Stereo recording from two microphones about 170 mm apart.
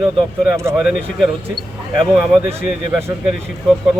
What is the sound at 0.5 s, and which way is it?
Speech, 15° right (ahead or behind).